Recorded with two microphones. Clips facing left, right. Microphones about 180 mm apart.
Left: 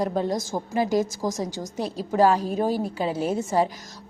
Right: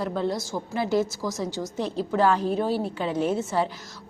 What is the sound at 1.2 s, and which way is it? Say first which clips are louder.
Speech: left 2 dB; 45° left (ahead or behind).